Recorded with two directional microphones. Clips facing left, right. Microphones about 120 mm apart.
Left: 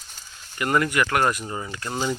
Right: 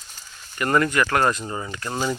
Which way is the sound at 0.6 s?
15° left (ahead or behind).